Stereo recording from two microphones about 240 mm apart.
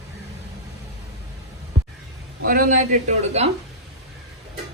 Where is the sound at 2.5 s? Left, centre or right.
Right.